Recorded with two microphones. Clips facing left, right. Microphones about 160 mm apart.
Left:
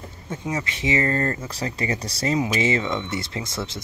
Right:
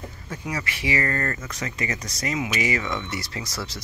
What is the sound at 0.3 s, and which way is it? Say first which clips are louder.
Speech: left 3 dB; 25° left (ahead or behind).